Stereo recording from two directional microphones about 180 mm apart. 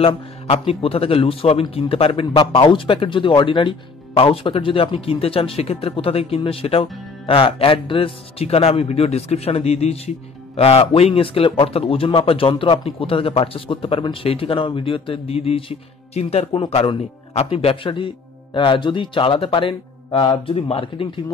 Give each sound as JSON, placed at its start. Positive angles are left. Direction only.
{"t": 0.0, "sound": "a man's voice", "side_deg": 30}